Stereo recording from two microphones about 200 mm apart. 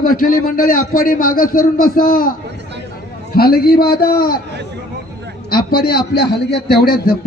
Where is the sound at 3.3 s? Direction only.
50° left (ahead or behind).